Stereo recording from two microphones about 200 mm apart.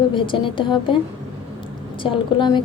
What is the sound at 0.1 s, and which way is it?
Speech, 25° left (ahead or behind).